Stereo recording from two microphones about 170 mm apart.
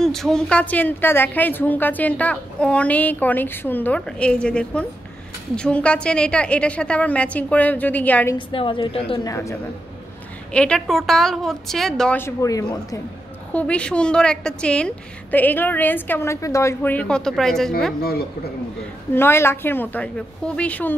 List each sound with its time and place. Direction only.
0.0 s a woman's voice: centre (ahead or behind)
8.4 s a woman's voice: 30° left (ahead or behind)
9.2 s a woman's voice: 20° left (ahead or behind)
10.5 s a woman's voice: 5° left (ahead or behind)
12.2 s a woman's voice: 15° left (ahead or behind)
13.5 s a woman's voice: 10° left (ahead or behind)
19.1 s a woman's voice: 15° left (ahead or behind)